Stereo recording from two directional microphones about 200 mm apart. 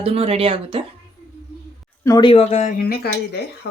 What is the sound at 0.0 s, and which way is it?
Speech, 30° right (ahead or behind).